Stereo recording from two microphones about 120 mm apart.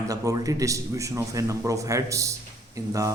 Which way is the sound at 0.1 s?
30° right (ahead or behind).